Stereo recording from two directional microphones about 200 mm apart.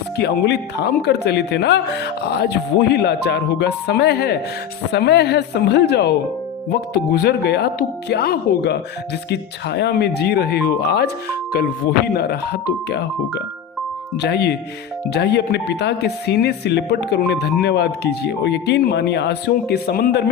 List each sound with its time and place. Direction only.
0.2 s speech: 55° left (ahead or behind)
14.2 s speech: 55° left (ahead or behind)